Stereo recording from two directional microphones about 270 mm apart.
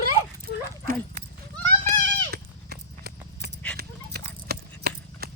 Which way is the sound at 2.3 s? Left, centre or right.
Right.